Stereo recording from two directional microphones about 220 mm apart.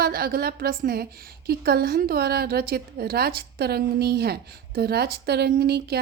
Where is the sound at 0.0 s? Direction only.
45° right (ahead or behind).